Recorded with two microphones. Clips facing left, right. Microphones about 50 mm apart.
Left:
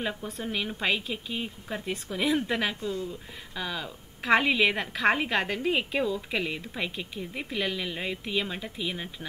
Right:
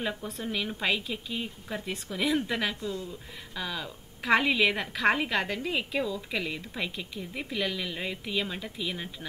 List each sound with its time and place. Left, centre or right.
0.0 s speech: centre
2.8 s speech: left
3.1 s speech: centre